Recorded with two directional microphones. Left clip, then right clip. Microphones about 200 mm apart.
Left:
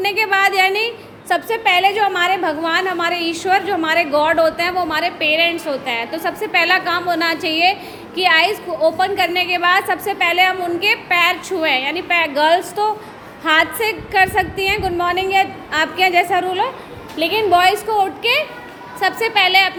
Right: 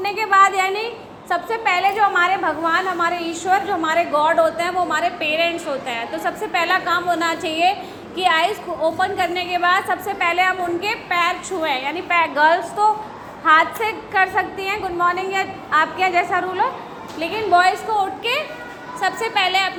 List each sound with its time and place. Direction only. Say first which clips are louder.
0.0 s a woman's voice: even; 40° left (ahead or behind)